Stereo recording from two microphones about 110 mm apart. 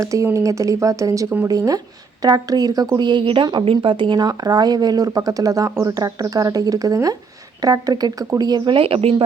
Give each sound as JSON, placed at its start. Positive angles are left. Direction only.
{"t": 0.0, "sound": "speech", "side_deg": -30}